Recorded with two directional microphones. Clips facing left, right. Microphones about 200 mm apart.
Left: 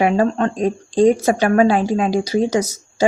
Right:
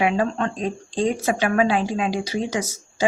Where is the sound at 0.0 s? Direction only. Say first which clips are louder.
Left 5 dB; 40° left (ahead or behind).